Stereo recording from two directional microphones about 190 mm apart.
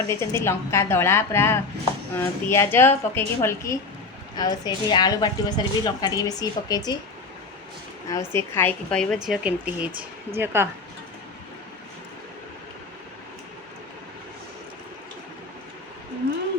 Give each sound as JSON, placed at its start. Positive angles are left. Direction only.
{"t": 0.1, "sound": "a woman's voice", "side_deg": 15}
{"t": 8.1, "sound": "a woman's voice", "side_deg": 15}